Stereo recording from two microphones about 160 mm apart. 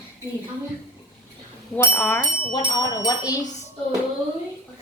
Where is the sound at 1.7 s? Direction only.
15° left (ahead or behind).